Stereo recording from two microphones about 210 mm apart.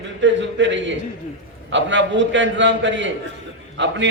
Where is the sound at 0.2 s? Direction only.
60° right (ahead or behind).